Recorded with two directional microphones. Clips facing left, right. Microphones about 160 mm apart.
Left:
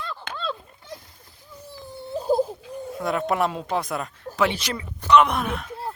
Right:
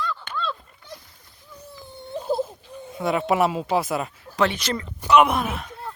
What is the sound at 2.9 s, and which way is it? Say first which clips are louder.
Speech: right 2 dB; centre (ahead or behind).